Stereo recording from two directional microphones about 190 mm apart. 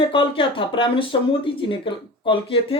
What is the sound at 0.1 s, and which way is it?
Speech, 25° left (ahead or behind).